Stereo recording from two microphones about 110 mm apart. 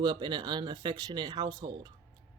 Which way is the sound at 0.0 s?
40° right (ahead or behind).